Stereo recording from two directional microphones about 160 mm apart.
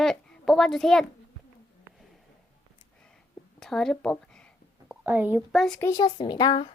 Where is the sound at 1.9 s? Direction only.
15° right (ahead or behind).